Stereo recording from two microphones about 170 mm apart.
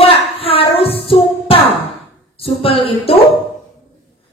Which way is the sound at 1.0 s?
35° left (ahead or behind).